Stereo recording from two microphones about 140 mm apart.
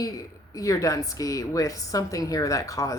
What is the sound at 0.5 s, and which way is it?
A woman's voice, 25° left (ahead or behind).